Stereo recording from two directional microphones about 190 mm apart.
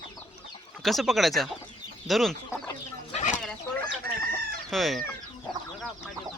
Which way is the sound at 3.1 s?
35° left (ahead or behind).